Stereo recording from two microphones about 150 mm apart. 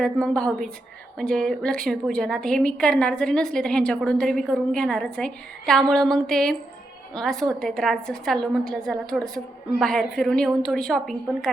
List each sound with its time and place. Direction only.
0.0 s a woman's voice: 5° left (ahead or behind)